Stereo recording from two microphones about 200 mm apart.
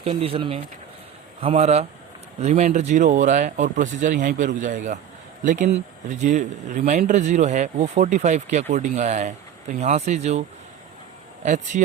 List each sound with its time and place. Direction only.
0.0 s speech: 30° right (ahead or behind)
11.4 s speech: 35° right (ahead or behind)